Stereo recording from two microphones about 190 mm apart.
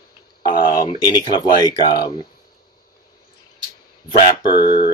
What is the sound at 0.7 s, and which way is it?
Speech, 20° left (ahead or behind).